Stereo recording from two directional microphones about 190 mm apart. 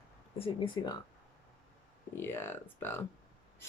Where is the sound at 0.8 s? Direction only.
20° left (ahead or behind).